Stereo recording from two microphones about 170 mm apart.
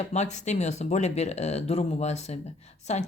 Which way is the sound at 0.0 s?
40° left (ahead or behind).